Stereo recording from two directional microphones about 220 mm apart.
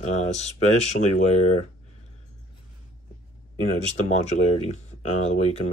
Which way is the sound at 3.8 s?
30° left (ahead or behind).